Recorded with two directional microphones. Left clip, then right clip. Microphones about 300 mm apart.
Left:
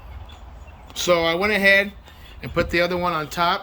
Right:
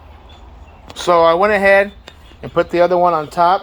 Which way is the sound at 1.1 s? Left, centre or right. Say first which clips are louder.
Right 8 dB; centre.